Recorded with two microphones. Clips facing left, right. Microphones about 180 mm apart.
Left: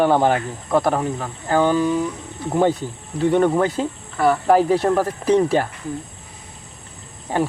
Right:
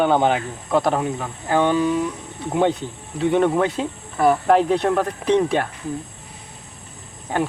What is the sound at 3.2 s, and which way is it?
Speech, centre (ahead or behind).